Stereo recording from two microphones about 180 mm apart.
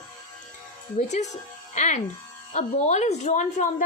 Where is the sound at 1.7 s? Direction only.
40° left (ahead or behind).